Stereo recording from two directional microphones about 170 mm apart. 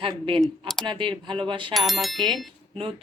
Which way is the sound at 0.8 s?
30° right (ahead or behind).